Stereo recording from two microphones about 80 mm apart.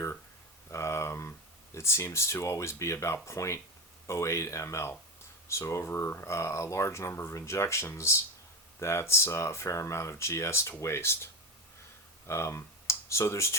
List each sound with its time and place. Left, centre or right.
0.7 s a sound: left
1.7 s speech: left
12.3 s speech: left